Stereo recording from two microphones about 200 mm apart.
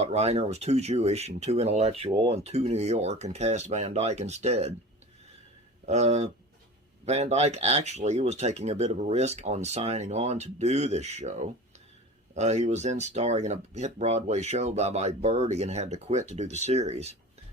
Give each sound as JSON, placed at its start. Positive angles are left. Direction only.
{"t": 0.0, "sound": "speech", "side_deg": -30}
{"t": 5.8, "sound": "speech", "side_deg": -35}